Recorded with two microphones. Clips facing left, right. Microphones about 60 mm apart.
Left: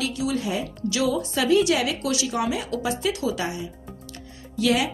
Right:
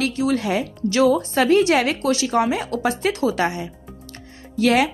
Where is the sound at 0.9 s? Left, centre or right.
Right.